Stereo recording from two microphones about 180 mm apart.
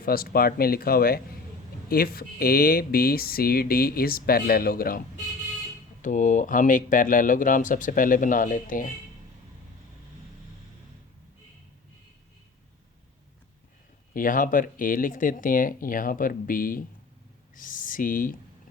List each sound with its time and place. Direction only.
0.0 s speech: 55° left (ahead or behind)
14.1 s speech: 50° left (ahead or behind)